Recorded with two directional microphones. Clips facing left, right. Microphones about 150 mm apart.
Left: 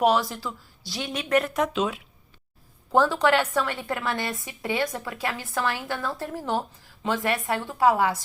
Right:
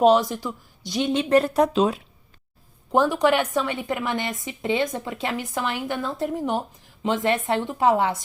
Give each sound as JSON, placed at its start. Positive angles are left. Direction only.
{"t": 0.0, "sound": "speech", "side_deg": -20}
{"t": 2.9, "sound": "speech", "side_deg": -15}